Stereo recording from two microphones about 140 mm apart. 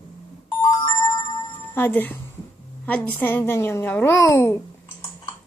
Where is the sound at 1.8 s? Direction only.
15° left (ahead or behind).